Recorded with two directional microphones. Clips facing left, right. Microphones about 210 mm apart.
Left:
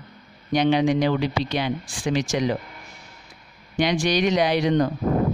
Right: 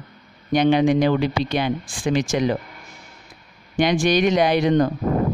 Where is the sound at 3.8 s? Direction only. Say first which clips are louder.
Right 3 dB; 50° right (ahead or behind).